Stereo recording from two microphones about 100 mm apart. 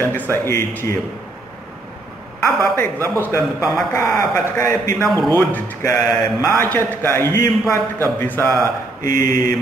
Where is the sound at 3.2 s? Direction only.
30° left (ahead or behind).